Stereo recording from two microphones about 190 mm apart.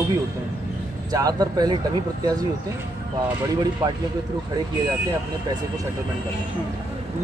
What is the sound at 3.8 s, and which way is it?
Speech, 15° right (ahead or behind).